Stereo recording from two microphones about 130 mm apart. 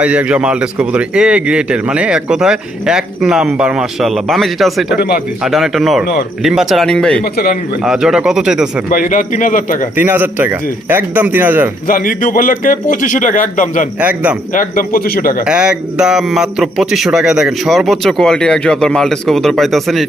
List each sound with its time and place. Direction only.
0.0 s speech: 10° right (ahead or behind)
7.9 s speech: 5° right (ahead or behind)
8.9 s speech: 90° left
10.0 s speech: 15° right (ahead or behind)
11.9 s a man's voice: 90° left
14.0 s speech: 10° right (ahead or behind)
14.5 s speech: 85° left
15.4 s speech: 5° right (ahead or behind)